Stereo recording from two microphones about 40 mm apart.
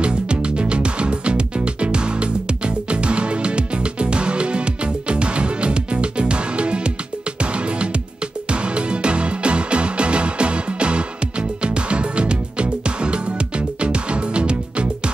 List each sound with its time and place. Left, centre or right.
0.0 s music: right